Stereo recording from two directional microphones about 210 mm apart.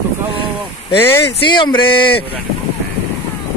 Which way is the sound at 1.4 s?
20° left (ahead or behind).